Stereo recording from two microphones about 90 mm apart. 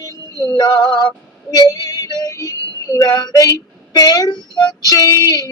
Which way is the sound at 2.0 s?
45° left (ahead or behind).